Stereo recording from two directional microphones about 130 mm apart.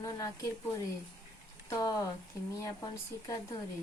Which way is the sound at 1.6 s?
25° left (ahead or behind).